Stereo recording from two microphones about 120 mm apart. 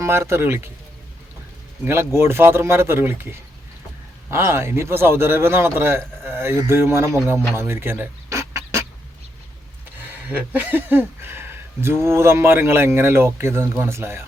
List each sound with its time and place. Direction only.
0.0 s speech: 20° right (ahead or behind)
1.8 s speech: 20° right (ahead or behind)
7.5 s a sound: 20° right (ahead or behind)
10.0 s speech: 15° right (ahead or behind)